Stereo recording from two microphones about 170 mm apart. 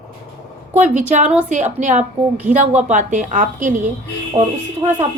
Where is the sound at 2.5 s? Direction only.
45° right (ahead or behind).